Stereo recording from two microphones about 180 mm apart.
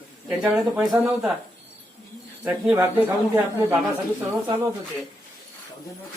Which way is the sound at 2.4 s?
10° right (ahead or behind).